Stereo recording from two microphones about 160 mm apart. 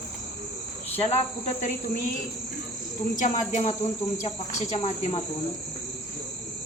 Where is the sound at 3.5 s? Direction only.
45° left (ahead or behind).